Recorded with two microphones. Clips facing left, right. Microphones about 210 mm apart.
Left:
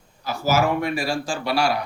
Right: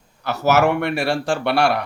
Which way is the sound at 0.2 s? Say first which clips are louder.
Right 4 dB; 70° right (ahead or behind).